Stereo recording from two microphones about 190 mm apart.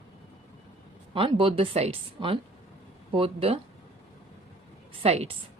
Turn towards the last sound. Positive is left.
turn(degrees=-35)  # may be behind; listen again after turning